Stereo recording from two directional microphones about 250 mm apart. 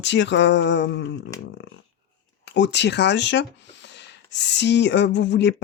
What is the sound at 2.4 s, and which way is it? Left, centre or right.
Speech, left.